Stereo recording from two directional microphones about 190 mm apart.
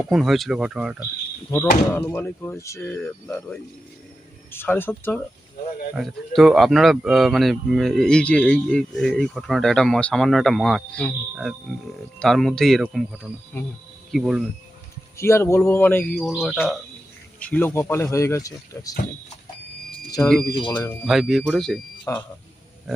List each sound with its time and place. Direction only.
0.1 s speech: centre (ahead or behind)
1.9 s speech: 10° left (ahead or behind)
5.9 s speech: centre (ahead or behind)
15.2 s speech: 15° left (ahead or behind)
20.5 s speech: 20° left (ahead or behind)
21.0 s speech: centre (ahead or behind)
22.1 s speech: 15° left (ahead or behind)